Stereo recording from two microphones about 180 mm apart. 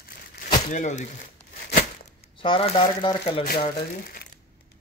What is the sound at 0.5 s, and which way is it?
Speech, 45° left (ahead or behind).